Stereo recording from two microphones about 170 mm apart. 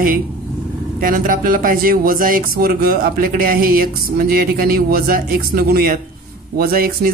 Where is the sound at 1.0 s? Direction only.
55° right (ahead or behind).